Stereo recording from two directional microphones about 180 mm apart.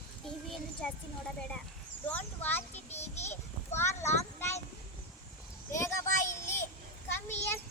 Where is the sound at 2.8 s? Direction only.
35° left (ahead or behind).